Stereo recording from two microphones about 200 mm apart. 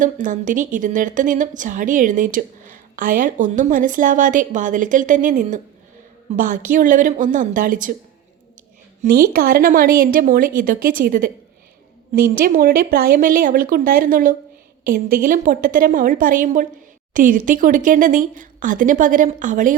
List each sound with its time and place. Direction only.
0.0 s a woman's voice: 40° right (ahead or behind)
9.0 s speech: 50° right (ahead or behind)
12.3 s a woman's voice: 45° right (ahead or behind)